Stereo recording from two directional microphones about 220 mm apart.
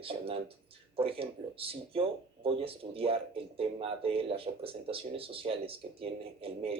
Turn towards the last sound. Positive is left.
turn(degrees=-25)  # may be behind; listen again after turning